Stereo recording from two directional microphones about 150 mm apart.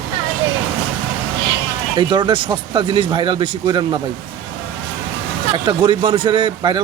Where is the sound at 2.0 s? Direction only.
30° right (ahead or behind).